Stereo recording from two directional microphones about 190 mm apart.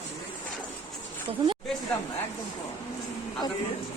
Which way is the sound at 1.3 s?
30° right (ahead or behind).